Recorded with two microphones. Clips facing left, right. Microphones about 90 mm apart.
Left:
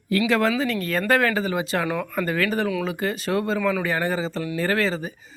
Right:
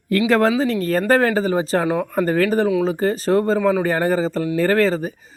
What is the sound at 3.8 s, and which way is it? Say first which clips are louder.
Speech: right 6 dB; 40° right (ahead or behind).